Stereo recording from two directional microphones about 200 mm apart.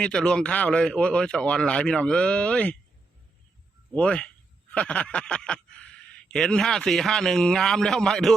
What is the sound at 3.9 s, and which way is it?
A man's voice, 5° left (ahead or behind).